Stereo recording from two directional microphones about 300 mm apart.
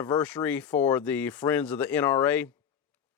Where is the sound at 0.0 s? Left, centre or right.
Centre.